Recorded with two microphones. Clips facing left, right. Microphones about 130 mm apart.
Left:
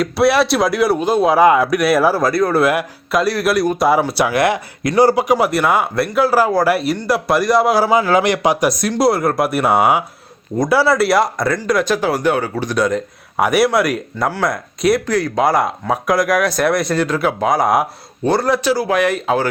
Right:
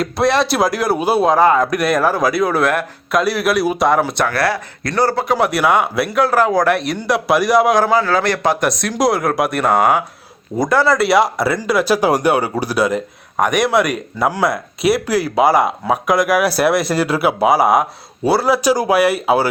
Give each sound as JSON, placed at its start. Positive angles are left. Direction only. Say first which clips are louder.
{"t": 0.0, "sound": "speech", "louder": "left 2 dB", "side_deg": 5}
{"t": 1.3, "sound": "speech", "louder": "left 3 dB", "side_deg": 10}
{"t": 5.5, "sound": "speech", "louder": "right 1 dB", "side_deg": 0}
{"t": 7.9, "sound": "speech", "louder": "left 2 dB", "side_deg": 15}
{"t": 14.3, "sound": "speech", "louder": "right 3 dB", "side_deg": -10}